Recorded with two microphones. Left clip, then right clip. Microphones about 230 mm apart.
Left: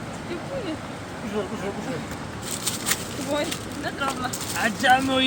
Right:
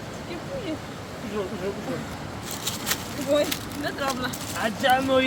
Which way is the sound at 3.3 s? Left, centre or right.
Right.